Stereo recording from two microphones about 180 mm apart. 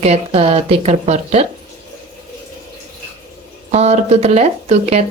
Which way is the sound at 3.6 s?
40° right (ahead or behind).